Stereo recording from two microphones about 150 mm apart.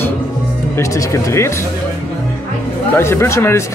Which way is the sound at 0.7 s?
20° left (ahead or behind).